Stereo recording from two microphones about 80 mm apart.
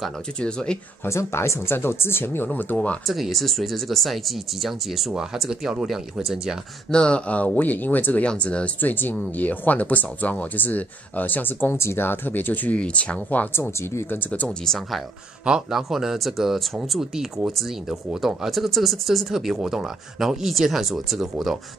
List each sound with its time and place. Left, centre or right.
0.4 s speech: centre
1.0 s speech: left; by 3.0 s centre
3.1 s speech: centre
6.9 s speech: centre; by 14.2 s left
14.2 s speech: centre
14.6 s speech: centre
15.4 s speech: centre